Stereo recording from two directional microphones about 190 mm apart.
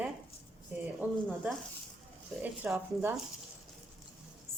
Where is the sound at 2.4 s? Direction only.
10° right (ahead or behind).